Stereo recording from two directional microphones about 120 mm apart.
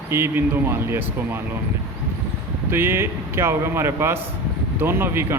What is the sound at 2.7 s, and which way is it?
A man's voice, 20° right (ahead or behind).